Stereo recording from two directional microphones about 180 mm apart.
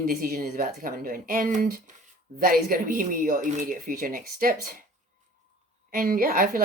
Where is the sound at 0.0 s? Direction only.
55° right (ahead or behind).